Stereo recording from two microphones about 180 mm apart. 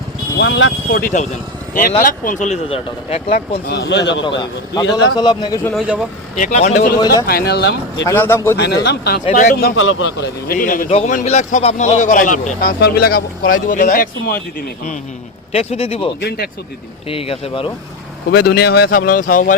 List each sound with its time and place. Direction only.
0.3 s speech: 80° left; by 3.3 s 30° left (ahead or behind)
3.7 s speech: 70° left (ahead or behind)
4.4 s a man's voice: 25° left (ahead or behind)
5.7 s a man's voice: 5° right (ahead or behind)
6.3 s speech: 40° left (ahead or behind)
7.0 s a man's voice: 20° left (ahead or behind)
7.3 s speech: 60° left (ahead or behind)
8.0 s a man's voice: 10° left (ahead or behind)
8.5 s speech: 65° left (ahead or behind)
9.3 s speech: 50° left (ahead or behind); by 10.2 s 90° left
10.5 s speech: 50° left (ahead or behind)
15.5 s speech: 35° left (ahead or behind)
17.1 s speech: 30° left (ahead or behind)
18.3 s speech: 65° left (ahead or behind); by 19.5 s 45° left (ahead or behind)